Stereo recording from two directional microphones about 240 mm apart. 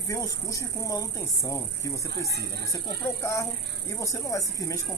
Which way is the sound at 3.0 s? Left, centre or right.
Centre.